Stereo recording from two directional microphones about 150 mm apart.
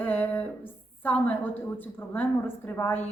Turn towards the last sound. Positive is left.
turn(degrees=15)  # may be behind; listen again after turning